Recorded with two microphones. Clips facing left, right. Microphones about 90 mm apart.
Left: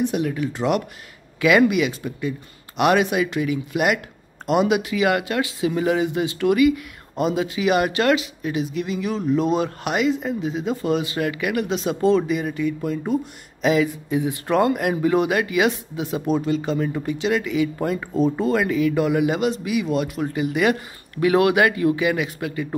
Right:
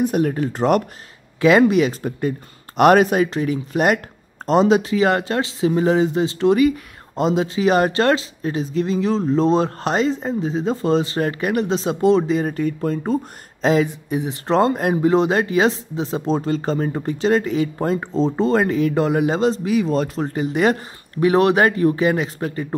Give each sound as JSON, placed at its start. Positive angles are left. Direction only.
{"t": 0.0, "sound": "speech", "side_deg": -45}
{"t": 12.4, "sound": "speech", "side_deg": -40}
{"t": 14.0, "sound": "speech", "side_deg": -20}